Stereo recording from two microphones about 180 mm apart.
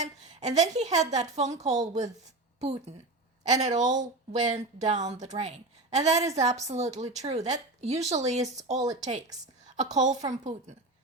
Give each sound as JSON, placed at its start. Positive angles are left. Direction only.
{"t": 0.0, "sound": "a woman's voice", "side_deg": -40}